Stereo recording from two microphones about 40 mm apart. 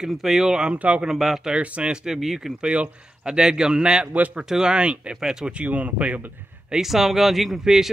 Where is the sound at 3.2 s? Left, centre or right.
Centre.